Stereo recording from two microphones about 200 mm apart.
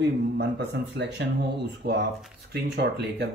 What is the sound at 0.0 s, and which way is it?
Speech, 60° right (ahead or behind).